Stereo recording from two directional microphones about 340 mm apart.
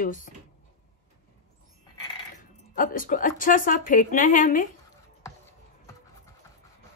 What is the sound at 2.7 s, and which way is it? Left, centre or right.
Speech, left.